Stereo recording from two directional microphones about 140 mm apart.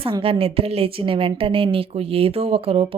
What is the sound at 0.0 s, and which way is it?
A woman's voice, 40° right (ahead or behind).